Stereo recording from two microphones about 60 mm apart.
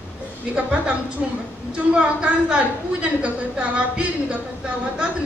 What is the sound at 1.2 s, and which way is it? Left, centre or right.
A woman's voice, centre.